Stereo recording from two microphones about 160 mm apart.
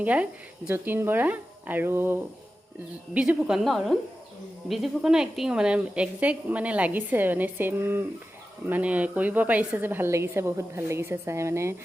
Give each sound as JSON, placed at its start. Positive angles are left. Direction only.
{"t": 0.0, "sound": "a woman's voice", "side_deg": -10}